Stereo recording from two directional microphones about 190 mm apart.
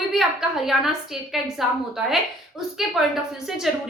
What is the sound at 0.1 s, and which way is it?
A woman's voice, centre (ahead or behind).